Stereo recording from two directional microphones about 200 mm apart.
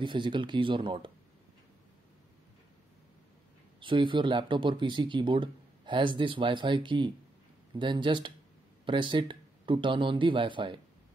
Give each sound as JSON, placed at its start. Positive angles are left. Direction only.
{"t": 0.0, "sound": "speech", "side_deg": -25}
{"t": 3.8, "sound": "speech", "side_deg": -25}